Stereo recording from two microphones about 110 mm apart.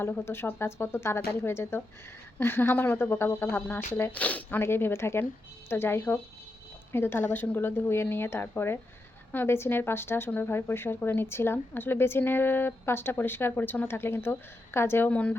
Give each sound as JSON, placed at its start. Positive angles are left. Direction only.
{"t": 0.0, "sound": "speech", "side_deg": 20}